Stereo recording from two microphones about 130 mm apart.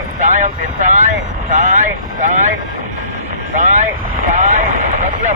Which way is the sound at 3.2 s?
80° right.